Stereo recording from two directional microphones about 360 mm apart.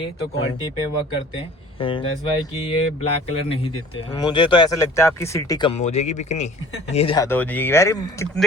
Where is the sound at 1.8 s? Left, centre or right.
Centre.